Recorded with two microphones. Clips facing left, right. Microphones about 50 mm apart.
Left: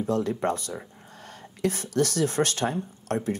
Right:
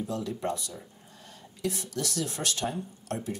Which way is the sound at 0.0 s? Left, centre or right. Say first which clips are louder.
Left 6 dB; left.